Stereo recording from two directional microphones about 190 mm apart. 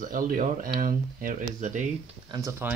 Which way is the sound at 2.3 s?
15° right (ahead or behind).